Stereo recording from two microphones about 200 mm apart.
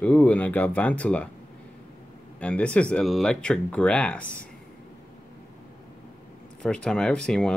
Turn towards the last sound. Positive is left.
turn(degrees=5)  # may be behind; listen again after turning